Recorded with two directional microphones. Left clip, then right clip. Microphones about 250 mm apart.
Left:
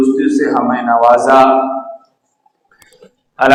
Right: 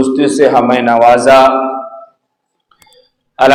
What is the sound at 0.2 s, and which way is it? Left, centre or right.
A man's voice, right.